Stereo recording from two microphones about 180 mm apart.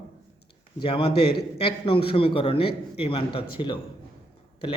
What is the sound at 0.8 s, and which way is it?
A man's voice, 30° left (ahead or behind).